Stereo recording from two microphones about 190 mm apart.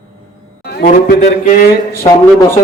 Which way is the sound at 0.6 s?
55° left (ahead or behind).